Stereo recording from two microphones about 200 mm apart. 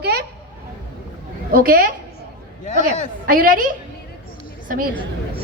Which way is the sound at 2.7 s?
40° left (ahead or behind).